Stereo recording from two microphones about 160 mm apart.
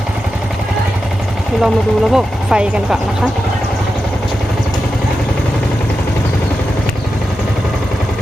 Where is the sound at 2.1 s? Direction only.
5° right (ahead or behind).